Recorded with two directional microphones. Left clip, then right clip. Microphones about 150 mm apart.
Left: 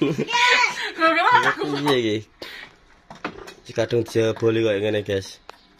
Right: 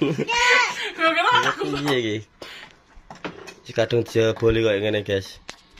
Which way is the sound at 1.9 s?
10° left (ahead or behind).